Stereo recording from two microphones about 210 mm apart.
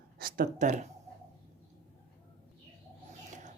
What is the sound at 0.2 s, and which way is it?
Speech, 40° right (ahead or behind).